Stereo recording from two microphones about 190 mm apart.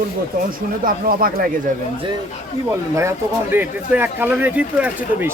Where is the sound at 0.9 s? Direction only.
50° right (ahead or behind).